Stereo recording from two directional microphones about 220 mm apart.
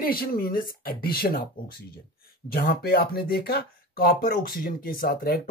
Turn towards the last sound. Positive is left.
turn(degrees=45)  # may be behind; listen again after turning